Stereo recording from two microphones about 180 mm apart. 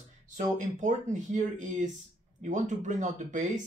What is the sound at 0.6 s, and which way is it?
Speech, 45° right (ahead or behind).